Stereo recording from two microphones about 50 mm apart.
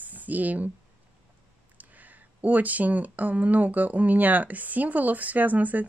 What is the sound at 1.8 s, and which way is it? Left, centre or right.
A woman's voice, right.